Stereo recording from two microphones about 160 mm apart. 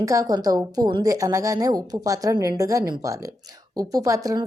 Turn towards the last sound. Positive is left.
turn(degrees=-20)  # may be behind; listen again after turning